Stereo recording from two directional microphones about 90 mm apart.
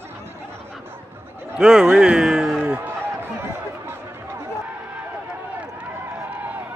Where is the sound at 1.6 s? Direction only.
10° right (ahead or behind).